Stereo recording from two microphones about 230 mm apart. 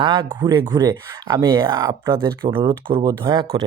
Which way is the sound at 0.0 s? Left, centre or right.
Right.